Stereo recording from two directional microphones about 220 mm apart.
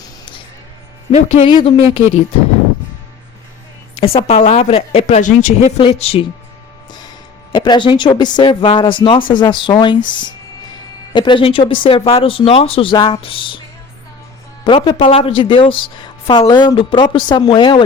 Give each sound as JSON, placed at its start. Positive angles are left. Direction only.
{"t": 1.1, "sound": "a woman's voice", "side_deg": 25}
{"t": 4.0, "sound": "a woman's voice", "side_deg": 25}
{"t": 7.5, "sound": "a woman's voice", "side_deg": 20}
{"t": 11.1, "sound": "a woman's voice", "side_deg": 20}
{"t": 14.6, "sound": "a woman's voice", "side_deg": 20}